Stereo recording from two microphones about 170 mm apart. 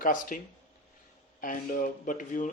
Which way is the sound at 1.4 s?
55° left (ahead or behind).